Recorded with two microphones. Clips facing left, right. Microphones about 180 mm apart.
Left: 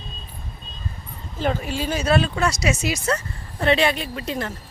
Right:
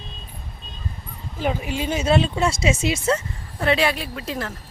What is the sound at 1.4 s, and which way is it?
A woman's voice, 15° right (ahead or behind).